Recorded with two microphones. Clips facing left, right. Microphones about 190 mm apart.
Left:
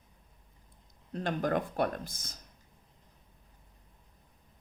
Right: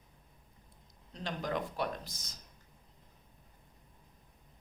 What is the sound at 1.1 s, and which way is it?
Speech, 55° left (ahead or behind).